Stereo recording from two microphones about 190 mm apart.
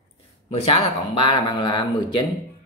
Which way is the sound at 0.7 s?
25° left (ahead or behind).